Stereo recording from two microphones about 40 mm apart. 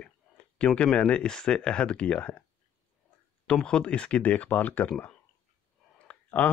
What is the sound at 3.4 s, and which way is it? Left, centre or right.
Speech, left.